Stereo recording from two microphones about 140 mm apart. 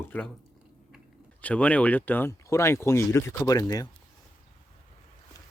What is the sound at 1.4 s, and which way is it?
Speech, 10° left (ahead or behind).